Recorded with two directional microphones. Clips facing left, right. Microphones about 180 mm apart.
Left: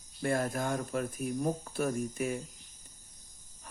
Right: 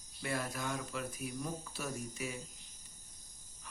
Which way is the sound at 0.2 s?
50° left (ahead or behind).